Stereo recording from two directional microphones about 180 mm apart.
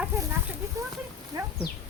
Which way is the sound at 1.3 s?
20° right (ahead or behind).